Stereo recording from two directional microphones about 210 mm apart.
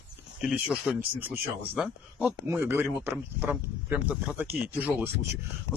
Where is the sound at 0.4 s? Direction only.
5° right (ahead or behind).